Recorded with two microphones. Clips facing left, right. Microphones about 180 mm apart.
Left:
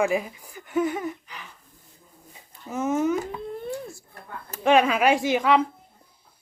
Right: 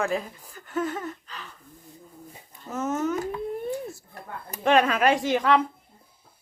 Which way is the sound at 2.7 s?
10° left (ahead or behind).